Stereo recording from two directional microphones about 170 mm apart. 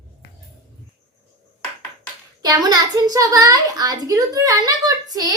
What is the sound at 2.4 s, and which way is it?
A child's voice, 20° right (ahead or behind).